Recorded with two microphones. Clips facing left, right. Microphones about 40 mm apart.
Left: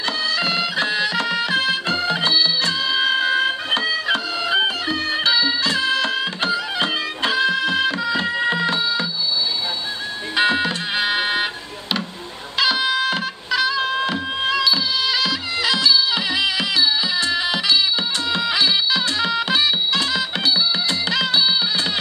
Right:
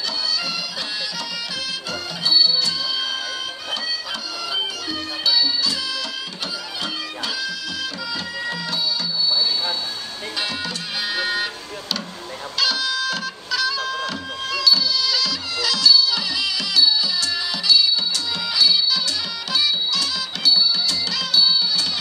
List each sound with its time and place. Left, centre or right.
0.4 s music: left
10.3 s music: left
12.5 s music: left